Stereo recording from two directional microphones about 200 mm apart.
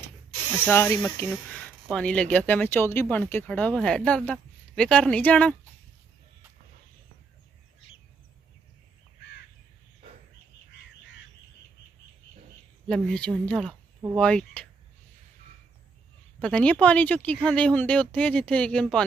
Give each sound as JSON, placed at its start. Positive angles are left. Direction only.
{"t": 0.5, "sound": "speech", "side_deg": 10}
{"t": 12.8, "sound": "speech", "side_deg": 5}
{"t": 16.3, "sound": "speech", "side_deg": 5}